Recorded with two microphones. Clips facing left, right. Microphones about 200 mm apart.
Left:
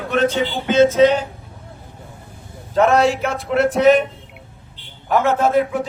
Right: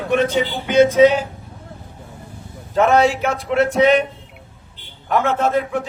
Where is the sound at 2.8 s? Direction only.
Centre (ahead or behind).